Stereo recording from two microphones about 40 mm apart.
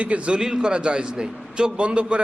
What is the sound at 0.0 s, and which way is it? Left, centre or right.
Speech, right.